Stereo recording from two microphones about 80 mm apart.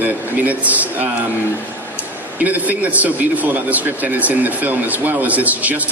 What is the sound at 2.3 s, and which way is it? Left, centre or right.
A man's voice, centre.